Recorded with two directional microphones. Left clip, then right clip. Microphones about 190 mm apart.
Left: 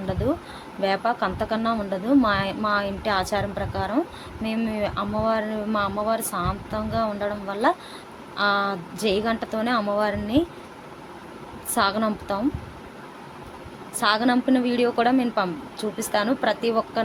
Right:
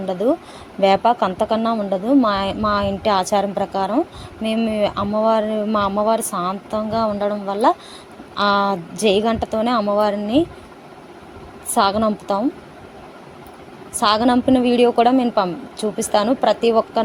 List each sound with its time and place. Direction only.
0.3 s speech: 5° right (ahead or behind)
0.8 s speech: 30° right (ahead or behind)
11.7 s speech: 25° right (ahead or behind)
14.0 s speech: 30° right (ahead or behind)